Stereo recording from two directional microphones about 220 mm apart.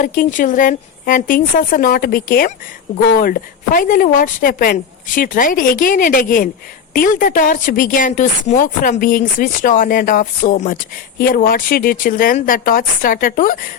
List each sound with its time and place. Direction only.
0.0 s a woman's voice: 35° left (ahead or behind)